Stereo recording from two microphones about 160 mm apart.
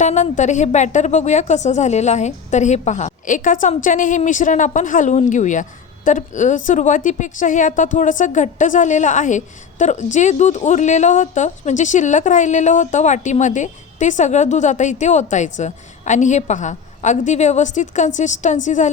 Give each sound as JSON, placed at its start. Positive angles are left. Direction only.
{"t": 0.0, "sound": "a woman's voice", "side_deg": 50}